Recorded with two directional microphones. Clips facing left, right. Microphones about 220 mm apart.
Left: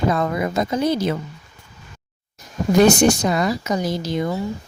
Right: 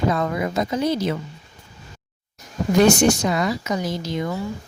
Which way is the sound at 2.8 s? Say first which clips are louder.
Left 1 dB; 35° left (ahead or behind).